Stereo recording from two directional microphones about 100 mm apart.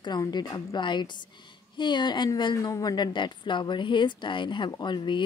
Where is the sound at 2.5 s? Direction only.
35° left (ahead or behind).